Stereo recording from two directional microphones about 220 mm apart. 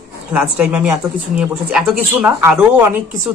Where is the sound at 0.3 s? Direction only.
5° right (ahead or behind).